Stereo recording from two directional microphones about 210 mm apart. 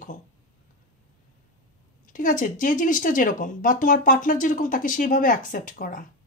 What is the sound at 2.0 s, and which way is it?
Speech, 40° left (ahead or behind).